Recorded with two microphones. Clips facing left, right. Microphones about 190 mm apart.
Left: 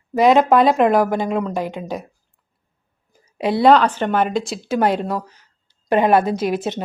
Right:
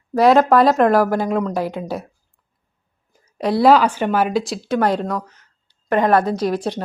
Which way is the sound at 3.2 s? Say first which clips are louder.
Even; 10° left (ahead or behind).